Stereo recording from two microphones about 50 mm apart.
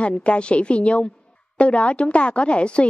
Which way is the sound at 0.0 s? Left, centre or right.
Left.